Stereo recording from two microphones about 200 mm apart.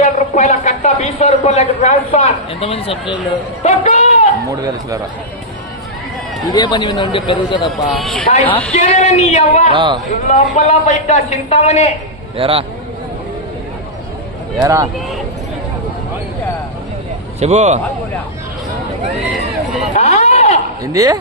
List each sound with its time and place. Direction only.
0.0 s a sound: 35° left (ahead or behind)
3.6 s music: 35° left (ahead or behind)
6.5 s speech: 20° left (ahead or behind)
7.9 s a man's voice: centre (ahead or behind)
8.7 s a man's voice: 35° left (ahead or behind)
9.7 s a man's voice: 25° right (ahead or behind)
10.2 s a man's voice: 35° left (ahead or behind)
12.4 s a man's voice: 25° right (ahead or behind)
14.6 s speech: 15° right (ahead or behind)
17.4 s a man's voice: 35° right (ahead or behind)
19.9 s a sound: 35° left (ahead or behind)
20.8 s speech: 15° right (ahead or behind)